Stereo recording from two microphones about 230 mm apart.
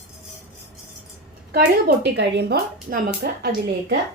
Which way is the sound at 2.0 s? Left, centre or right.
Right.